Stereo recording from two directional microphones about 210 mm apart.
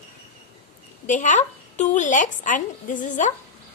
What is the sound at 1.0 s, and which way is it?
A woman's voice, 35° left (ahead or behind).